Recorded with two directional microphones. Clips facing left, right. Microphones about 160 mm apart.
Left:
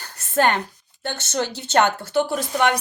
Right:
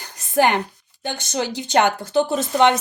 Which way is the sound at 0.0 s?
15° right (ahead or behind).